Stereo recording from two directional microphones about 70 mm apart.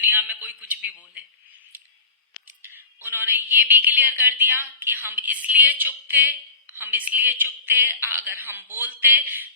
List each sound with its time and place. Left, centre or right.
0.0 s a man's voice: right
2.6 s speech: right